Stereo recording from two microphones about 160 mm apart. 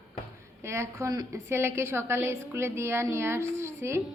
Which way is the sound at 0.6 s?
15° right (ahead or behind).